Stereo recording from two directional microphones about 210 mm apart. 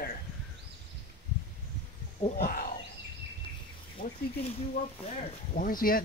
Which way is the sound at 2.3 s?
45° left (ahead or behind).